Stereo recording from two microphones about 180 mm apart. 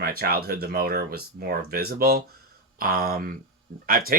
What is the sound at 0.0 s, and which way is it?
Speech, 55° right (ahead or behind).